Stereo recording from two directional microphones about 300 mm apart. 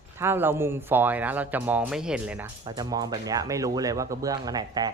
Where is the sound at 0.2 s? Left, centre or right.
Centre.